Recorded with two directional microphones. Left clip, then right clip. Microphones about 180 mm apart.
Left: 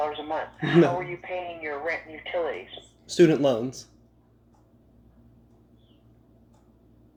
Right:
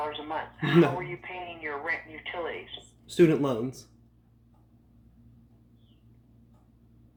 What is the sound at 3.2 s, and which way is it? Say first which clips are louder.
Speech: left 3 dB; 20° right (ahead or behind).